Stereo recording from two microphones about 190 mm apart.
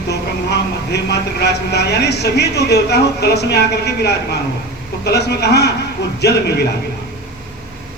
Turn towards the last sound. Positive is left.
turn(degrees=60)  # may be behind; listen again after turning